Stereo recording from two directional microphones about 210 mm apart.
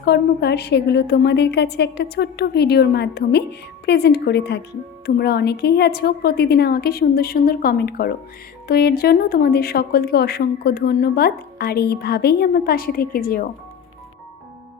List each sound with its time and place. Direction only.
0.0 s speech: 50° left (ahead or behind)